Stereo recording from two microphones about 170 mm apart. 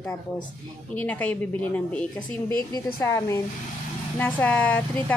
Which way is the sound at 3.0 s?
20° left (ahead or behind).